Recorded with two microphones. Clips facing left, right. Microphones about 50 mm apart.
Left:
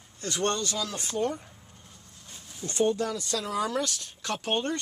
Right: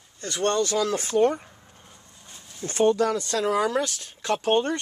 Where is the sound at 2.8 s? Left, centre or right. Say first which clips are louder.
Right 6 dB; right.